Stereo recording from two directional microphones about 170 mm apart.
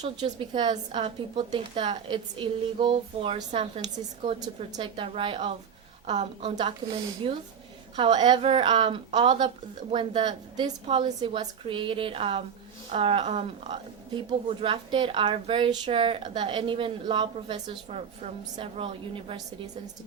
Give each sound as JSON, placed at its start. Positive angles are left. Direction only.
{"t": 0.3, "sound": "speech", "side_deg": -30}